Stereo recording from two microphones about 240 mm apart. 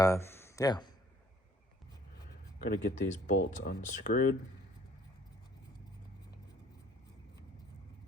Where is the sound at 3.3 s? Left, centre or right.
Left.